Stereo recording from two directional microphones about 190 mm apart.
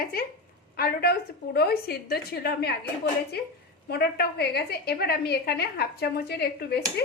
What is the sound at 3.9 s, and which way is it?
A woman's voice, 55° left (ahead or behind).